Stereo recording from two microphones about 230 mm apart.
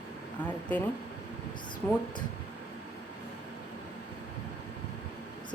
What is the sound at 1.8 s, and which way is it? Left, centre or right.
Speech, centre.